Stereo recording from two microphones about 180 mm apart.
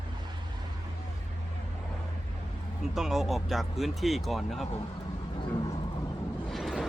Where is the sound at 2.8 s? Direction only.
Centre (ahead or behind).